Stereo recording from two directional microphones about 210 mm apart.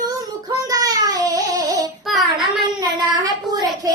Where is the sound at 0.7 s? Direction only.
15° right (ahead or behind).